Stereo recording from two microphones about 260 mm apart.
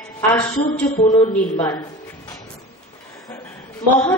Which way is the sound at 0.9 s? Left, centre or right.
Left.